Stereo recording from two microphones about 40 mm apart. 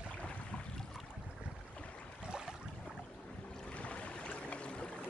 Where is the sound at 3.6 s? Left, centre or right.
Left.